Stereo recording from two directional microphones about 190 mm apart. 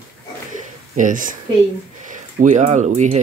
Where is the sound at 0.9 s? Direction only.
45° right (ahead or behind).